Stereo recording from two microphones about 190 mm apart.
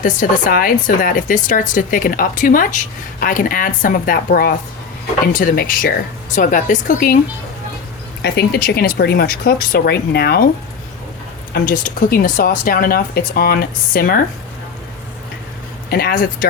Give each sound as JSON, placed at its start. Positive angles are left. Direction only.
{"t": 0.0, "sound": "speech", "side_deg": 45}
{"t": 8.2, "sound": "speech", "side_deg": 55}
{"t": 11.5, "sound": "speech", "side_deg": 50}
{"t": 15.9, "sound": "speech", "side_deg": 55}